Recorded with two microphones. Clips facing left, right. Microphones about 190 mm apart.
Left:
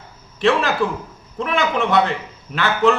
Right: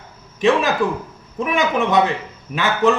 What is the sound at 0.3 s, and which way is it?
A man's voice, 15° right (ahead or behind).